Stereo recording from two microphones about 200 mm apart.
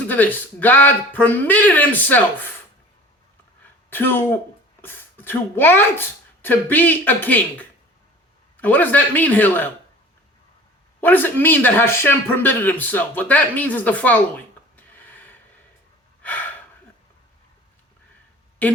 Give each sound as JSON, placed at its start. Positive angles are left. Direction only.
{"t": 0.1, "sound": "speech", "side_deg": 10}
{"t": 3.6, "sound": "a sound", "side_deg": 10}
{"t": 4.8, "sound": "speech", "side_deg": 10}
{"t": 11.0, "sound": "speech", "side_deg": 10}
{"t": 14.8, "sound": "a sound", "side_deg": 10}
{"t": 16.2, "sound": "gasp", "side_deg": 10}